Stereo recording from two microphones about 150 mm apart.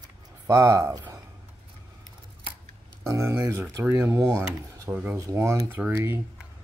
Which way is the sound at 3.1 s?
20° right (ahead or behind).